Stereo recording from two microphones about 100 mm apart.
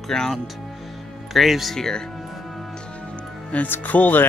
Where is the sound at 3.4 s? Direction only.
15° left (ahead or behind).